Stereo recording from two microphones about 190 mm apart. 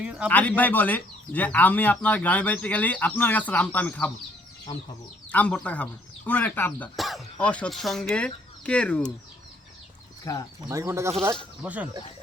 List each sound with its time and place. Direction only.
0.0 s a sound: 5° right (ahead or behind)
0.3 s speech: 5° left (ahead or behind)
5.3 s speech: 5° left (ahead or behind)
10.3 s speech: 15° left (ahead or behind)
10.7 s speech: 15° right (ahead or behind)